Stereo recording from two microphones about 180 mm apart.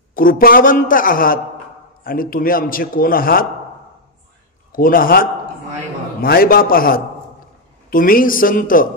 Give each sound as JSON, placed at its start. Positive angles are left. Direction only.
{"t": 0.1, "sound": "a man's voice", "side_deg": 50}
{"t": 4.7, "sound": "a man's voice", "side_deg": 50}